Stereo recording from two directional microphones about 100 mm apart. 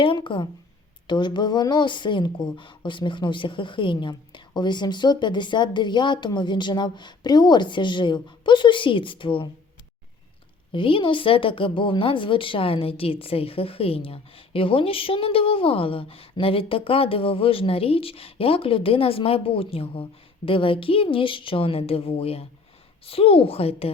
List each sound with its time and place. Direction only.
0.0 s a woman's voice: 55° left (ahead or behind)
10.7 s a woman's voice: 60° left (ahead or behind); by 23.9 s 75° left (ahead or behind)